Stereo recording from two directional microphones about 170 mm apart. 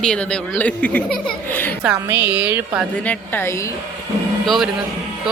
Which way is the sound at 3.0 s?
15° left (ahead or behind).